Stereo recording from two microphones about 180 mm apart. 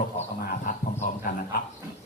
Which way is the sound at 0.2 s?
45° left (ahead or behind).